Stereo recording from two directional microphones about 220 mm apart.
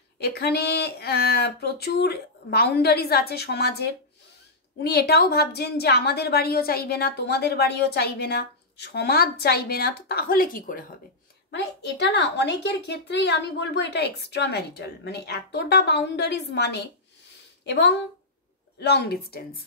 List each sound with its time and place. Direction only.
0.2 s a woman's voice: 45° left (ahead or behind)
11.5 s a woman's voice: 50° left (ahead or behind)